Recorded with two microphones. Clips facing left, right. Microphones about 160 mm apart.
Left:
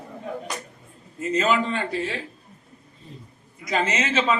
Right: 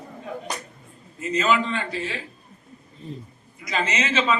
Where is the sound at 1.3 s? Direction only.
50° left (ahead or behind).